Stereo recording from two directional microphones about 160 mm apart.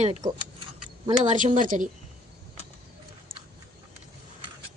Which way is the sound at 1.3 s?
55° right (ahead or behind).